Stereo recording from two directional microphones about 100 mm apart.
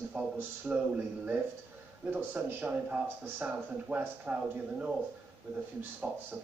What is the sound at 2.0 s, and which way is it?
Speech, 15° right (ahead or behind).